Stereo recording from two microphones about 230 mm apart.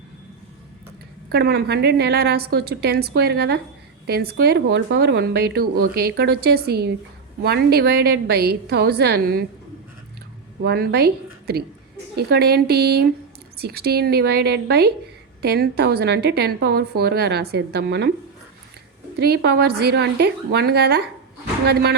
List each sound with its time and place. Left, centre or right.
1.3 s speech: right
10.6 s a woman's voice: right
19.1 s speech: right